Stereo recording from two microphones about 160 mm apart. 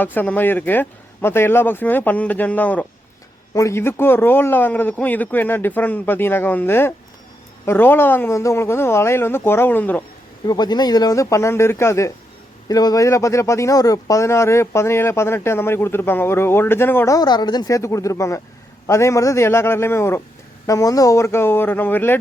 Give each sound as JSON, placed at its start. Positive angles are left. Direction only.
{"t": 0.0, "sound": "speech", "side_deg": 10}
{"t": 10.4, "sound": "speech", "side_deg": 25}
{"t": 17.2, "sound": "speech", "side_deg": 25}